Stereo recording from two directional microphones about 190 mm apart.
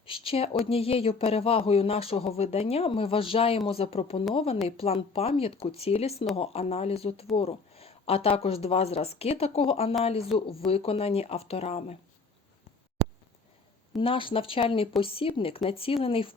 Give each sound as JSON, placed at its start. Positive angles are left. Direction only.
{"t": 0.0, "sound": "a sound", "side_deg": 30}
{"t": 0.6, "sound": "speech", "side_deg": 30}
{"t": 13.9, "sound": "speech", "side_deg": 30}